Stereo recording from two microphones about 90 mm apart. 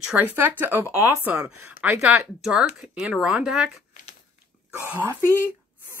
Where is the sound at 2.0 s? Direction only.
10° right (ahead or behind).